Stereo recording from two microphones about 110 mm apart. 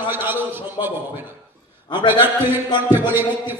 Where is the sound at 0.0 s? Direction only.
20° right (ahead or behind).